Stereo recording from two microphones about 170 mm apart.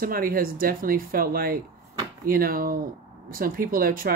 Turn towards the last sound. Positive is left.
turn(degrees=-55)  # may be behind; listen again after turning